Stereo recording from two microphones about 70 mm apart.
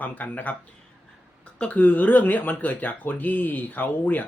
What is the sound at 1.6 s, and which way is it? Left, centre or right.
Speech, left.